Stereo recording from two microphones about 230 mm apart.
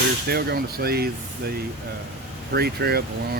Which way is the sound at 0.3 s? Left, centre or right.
Right.